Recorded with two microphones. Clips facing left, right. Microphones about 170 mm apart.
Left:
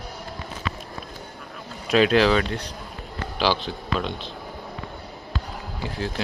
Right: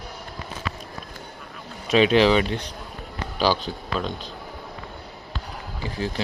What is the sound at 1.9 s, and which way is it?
Speech, 5° right (ahead or behind).